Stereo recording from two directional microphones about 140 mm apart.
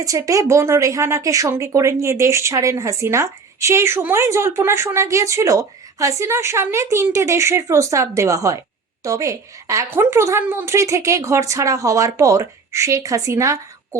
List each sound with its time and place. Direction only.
0.0 s a woman's voice: 25° right (ahead or behind)